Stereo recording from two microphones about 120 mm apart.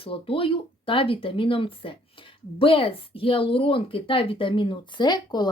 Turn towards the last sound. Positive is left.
turn(degrees=35)  # may be behind; listen again after turning